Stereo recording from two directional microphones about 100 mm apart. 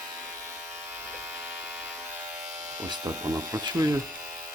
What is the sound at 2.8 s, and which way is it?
Speech, 35° right (ahead or behind).